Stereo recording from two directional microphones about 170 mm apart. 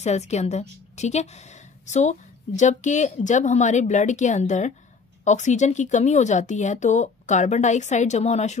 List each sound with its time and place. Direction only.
0.0 s a woman's voice: 40° left (ahead or behind)